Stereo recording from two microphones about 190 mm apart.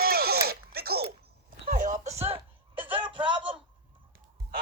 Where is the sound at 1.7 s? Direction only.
45° right (ahead or behind); by 3.4 s 25° right (ahead or behind).